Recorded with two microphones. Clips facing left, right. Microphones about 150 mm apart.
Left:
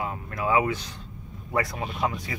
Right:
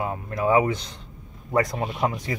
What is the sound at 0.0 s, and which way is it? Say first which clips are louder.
Speech: right 4 dB; 30° right (ahead or behind).